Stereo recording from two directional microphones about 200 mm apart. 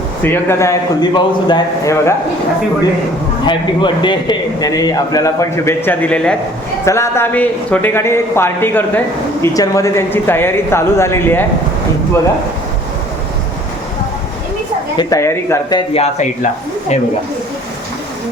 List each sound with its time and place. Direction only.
0.2 s a man's voice: 10° left (ahead or behind)
3.4 s a man's voice: 25° left (ahead or behind)
14.9 s a man's voice: 15° left (ahead or behind)
15.9 s speech: 30° left (ahead or behind)